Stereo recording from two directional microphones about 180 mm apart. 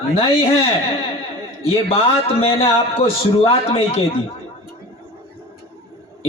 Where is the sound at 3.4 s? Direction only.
30° left (ahead or behind).